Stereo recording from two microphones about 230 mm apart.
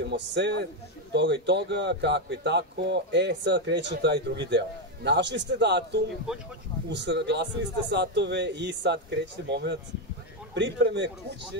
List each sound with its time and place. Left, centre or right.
0.0 s speech: right